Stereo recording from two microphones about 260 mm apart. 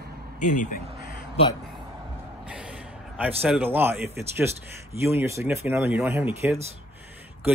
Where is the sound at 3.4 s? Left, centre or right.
Centre.